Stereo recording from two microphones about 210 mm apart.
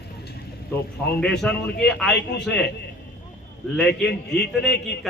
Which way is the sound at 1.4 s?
5° left (ahead or behind).